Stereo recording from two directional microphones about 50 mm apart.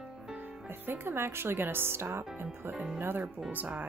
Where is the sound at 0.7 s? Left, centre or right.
Right.